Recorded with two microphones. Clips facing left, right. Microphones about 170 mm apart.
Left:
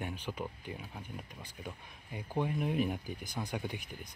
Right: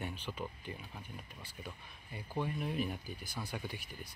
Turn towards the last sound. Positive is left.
turn(degrees=20)  # may be behind; listen again after turning